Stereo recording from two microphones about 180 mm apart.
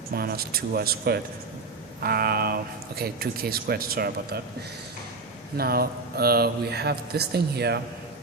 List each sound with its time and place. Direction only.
0.1 s speech: 55° right (ahead or behind)
5.5 s speech: 55° right (ahead or behind)